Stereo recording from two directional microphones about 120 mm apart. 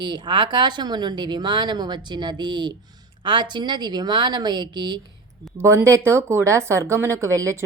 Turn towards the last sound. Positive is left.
turn(degrees=-25)  # may be behind; listen again after turning